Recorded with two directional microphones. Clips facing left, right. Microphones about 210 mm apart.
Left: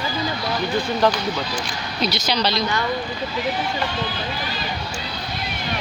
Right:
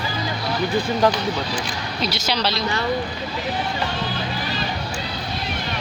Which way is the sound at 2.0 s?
5° right (ahead or behind).